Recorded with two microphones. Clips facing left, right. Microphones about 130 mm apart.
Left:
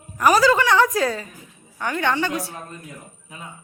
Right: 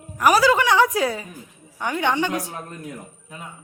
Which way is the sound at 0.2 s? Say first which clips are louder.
Even; 10° right (ahead or behind).